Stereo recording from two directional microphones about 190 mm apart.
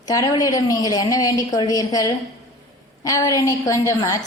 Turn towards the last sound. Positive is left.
turn(degrees=15)  # may be behind; listen again after turning